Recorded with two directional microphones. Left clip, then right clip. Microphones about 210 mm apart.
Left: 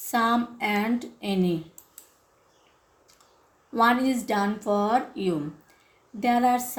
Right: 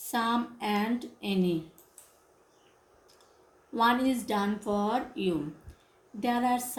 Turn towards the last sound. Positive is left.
turn(degrees=45)  # may be behind; listen again after turning